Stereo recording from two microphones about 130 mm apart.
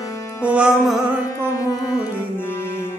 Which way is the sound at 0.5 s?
10° right (ahead or behind).